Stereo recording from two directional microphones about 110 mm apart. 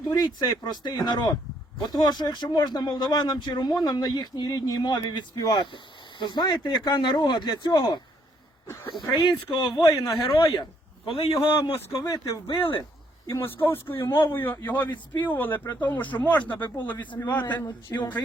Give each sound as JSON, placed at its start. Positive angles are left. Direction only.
{"t": 0.1, "sound": "speech", "side_deg": 35}
{"t": 8.6, "sound": "a sound", "side_deg": 20}
{"t": 9.1, "sound": "a man's voice", "side_deg": 45}
{"t": 11.9, "sound": "speech", "side_deg": 35}
{"t": 13.2, "sound": "speech", "side_deg": 25}
{"t": 17.7, "sound": "speech", "side_deg": 40}